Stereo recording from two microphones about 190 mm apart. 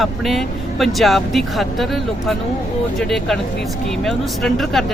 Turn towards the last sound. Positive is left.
turn(degrees=0)  # may be behind; listen again after turning